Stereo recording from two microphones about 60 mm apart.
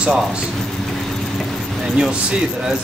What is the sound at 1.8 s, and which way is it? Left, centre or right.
Speech, centre.